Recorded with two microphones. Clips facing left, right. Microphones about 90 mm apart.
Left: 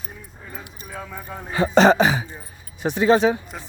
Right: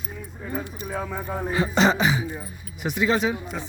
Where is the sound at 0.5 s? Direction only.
Centre (ahead or behind).